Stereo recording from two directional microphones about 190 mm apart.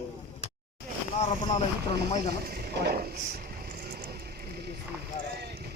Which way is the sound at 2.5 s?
55° right (ahead or behind).